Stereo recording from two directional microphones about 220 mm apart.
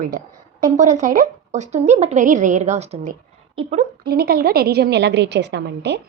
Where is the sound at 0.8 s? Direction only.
35° right (ahead or behind).